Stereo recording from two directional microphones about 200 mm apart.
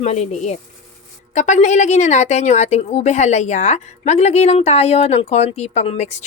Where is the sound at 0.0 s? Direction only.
35° left (ahead or behind).